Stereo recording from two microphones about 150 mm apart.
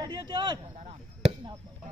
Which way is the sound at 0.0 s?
30° right (ahead or behind).